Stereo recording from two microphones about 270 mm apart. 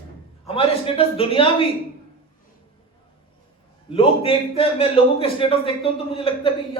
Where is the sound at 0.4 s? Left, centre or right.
Left.